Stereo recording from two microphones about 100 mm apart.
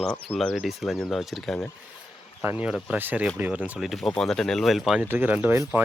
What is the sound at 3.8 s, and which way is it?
Speech, centre (ahead or behind).